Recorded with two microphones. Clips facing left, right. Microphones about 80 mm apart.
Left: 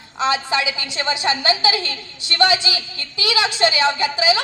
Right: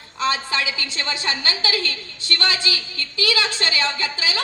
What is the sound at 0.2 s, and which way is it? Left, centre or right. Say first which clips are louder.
A woman's voice: left 3 dB; centre.